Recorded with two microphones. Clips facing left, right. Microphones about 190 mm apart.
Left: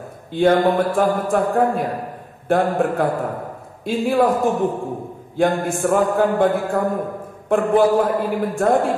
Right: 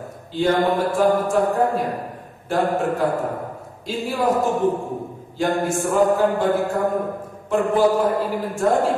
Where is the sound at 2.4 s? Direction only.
55° left (ahead or behind).